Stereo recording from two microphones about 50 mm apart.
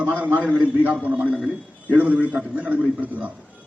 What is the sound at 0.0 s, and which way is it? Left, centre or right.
A man's voice, right.